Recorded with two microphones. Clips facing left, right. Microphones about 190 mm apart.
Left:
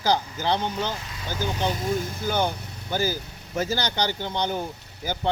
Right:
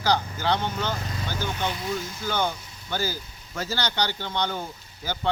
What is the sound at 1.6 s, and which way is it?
Speech, 45° left (ahead or behind).